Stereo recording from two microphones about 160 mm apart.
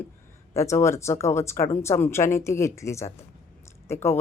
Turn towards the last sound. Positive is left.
turn(degrees=15)  # may be behind; listen again after turning